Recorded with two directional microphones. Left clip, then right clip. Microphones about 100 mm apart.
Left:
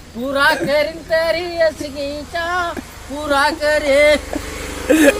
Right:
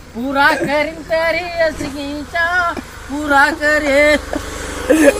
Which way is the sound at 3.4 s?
35° left (ahead or behind).